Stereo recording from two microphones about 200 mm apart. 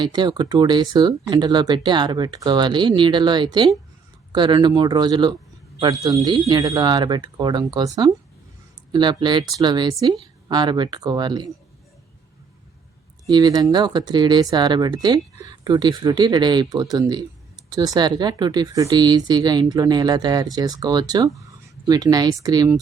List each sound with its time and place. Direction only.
0.0 s speech: 20° right (ahead or behind)
13.2 s speech: 20° right (ahead or behind)